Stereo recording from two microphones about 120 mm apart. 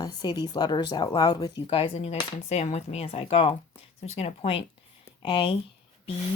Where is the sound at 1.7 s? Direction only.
50° left (ahead or behind).